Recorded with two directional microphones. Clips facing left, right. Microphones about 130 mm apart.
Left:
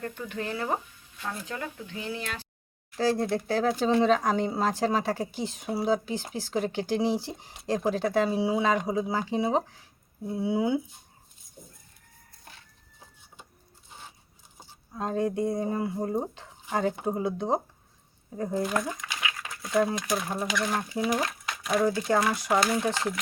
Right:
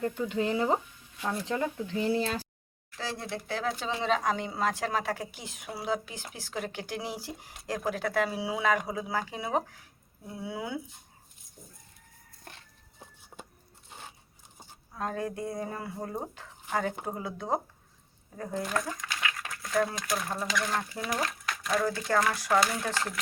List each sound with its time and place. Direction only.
0.0 s speech: 20° right (ahead or behind); by 2.5 s 35° right (ahead or behind)
3.0 s speech: 40° left (ahead or behind); by 10.8 s 25° left (ahead or behind)
14.9 s speech: 20° left (ahead or behind)
19.2 s a sound: 15° left (ahead or behind)
20.3 s speech: 20° left (ahead or behind)
21.1 s speech: 20° left (ahead or behind)
21.6 s speech: 5° left (ahead or behind)
21.8 s speech: 15° left (ahead or behind)